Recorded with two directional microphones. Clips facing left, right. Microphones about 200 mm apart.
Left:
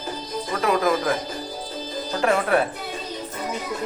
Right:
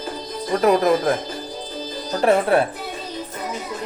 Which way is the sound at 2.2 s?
35° right (ahead or behind).